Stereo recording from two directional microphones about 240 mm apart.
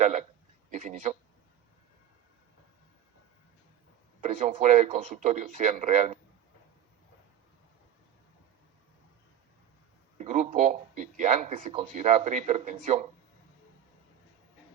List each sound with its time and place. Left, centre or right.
0.0 s a man's voice: right
4.2 s speech: right
10.2 s speech: right